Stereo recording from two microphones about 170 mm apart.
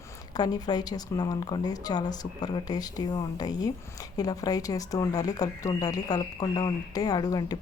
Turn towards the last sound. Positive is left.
turn(degrees=20)  # may be behind; listen again after turning